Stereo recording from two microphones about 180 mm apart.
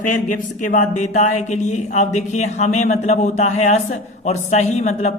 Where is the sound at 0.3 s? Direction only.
45° left (ahead or behind).